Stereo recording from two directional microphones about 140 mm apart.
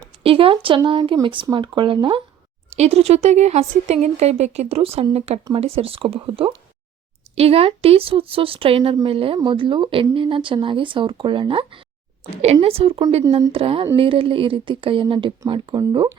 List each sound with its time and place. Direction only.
0.2 s speech: 40° right (ahead or behind)
2.6 s speech: 50° right (ahead or behind)